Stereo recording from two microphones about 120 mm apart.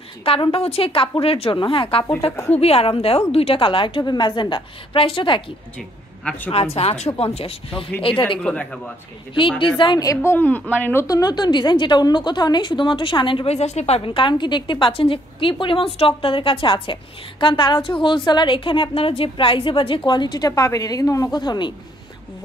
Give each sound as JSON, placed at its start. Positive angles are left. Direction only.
{"t": 0.2, "sound": "a woman's voice", "side_deg": 50}
{"t": 5.8, "sound": "a man's voice", "side_deg": 10}
{"t": 6.5, "sound": "a woman's voice", "side_deg": 55}
{"t": 8.4, "sound": "a woman's voice", "side_deg": 10}
{"t": 9.3, "sound": "a woman's voice", "side_deg": 45}
{"t": 10.0, "sound": "a woman's voice", "side_deg": 20}
{"t": 11.1, "sound": "a woman's voice", "side_deg": 30}